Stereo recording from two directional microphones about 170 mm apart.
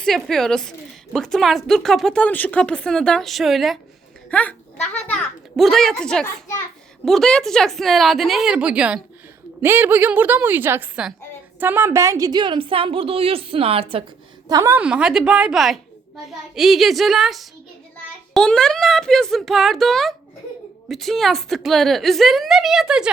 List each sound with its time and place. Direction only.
0.0 s a woman's voice: centre (ahead or behind); by 14.0 s 35° right (ahead or behind)
14.4 s a woman's voice: 20° right (ahead or behind); by 23.0 s 5° right (ahead or behind)